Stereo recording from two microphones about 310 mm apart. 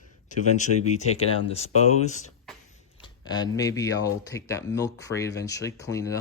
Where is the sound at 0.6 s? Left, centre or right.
Left.